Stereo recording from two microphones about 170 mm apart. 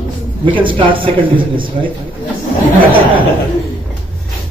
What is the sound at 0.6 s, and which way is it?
Speech, 30° right (ahead or behind).